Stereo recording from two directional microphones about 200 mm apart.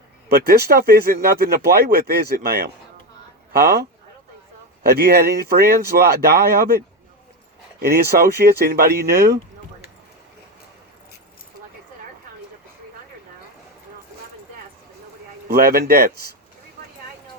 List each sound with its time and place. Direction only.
0.3 s speech: 50° right (ahead or behind)
8.4 s speech: 50° right (ahead or behind)
15.4 s speech: 50° right (ahead or behind)